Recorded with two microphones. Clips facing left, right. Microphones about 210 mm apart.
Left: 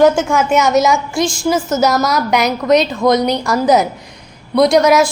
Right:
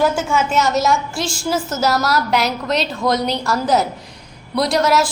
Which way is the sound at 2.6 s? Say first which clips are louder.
Left 7 dB; 10° left (ahead or behind).